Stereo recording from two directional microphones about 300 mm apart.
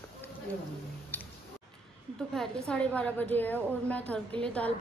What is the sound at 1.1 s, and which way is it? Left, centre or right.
Music, centre.